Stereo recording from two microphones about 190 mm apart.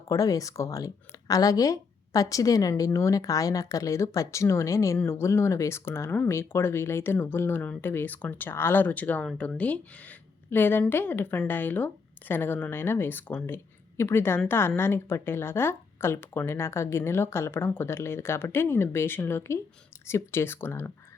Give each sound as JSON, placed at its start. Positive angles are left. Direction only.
{"t": 0.1, "sound": "speech", "side_deg": 20}